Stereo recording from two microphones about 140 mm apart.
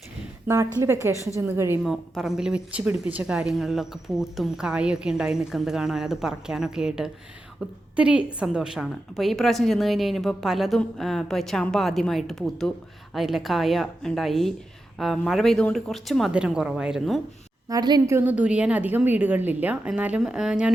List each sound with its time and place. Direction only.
0.4 s a woman's voice: 20° right (ahead or behind)
1.8 s a woman's voice: centre (ahead or behind)
17.7 s a woman's voice: 30° right (ahead or behind); by 20.7 s 5° right (ahead or behind)